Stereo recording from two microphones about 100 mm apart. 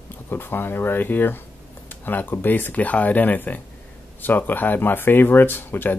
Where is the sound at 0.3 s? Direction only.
20° left (ahead or behind).